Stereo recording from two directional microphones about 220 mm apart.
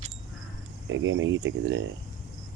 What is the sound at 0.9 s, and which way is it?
Speech, 60° right (ahead or behind).